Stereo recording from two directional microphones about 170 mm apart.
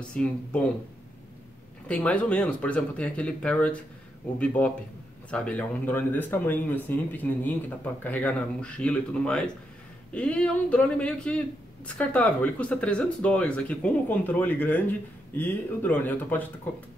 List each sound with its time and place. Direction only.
0.0 s a man's voice: 5° left (ahead or behind)
1.9 s a man's voice: 10° left (ahead or behind)